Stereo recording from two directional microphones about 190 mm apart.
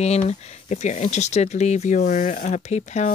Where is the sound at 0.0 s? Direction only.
35° left (ahead or behind).